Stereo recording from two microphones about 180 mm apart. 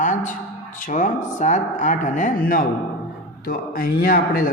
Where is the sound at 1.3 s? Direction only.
45° left (ahead or behind).